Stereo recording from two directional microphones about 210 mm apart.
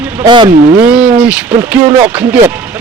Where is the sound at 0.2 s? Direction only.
20° right (ahead or behind).